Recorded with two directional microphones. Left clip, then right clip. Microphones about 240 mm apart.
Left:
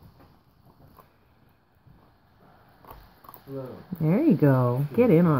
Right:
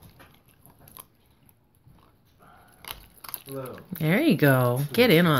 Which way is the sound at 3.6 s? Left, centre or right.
Right.